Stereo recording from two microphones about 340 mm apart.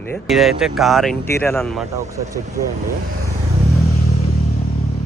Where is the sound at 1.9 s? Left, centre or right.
Centre.